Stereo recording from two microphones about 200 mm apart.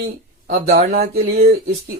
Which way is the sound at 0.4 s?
50° right (ahead or behind).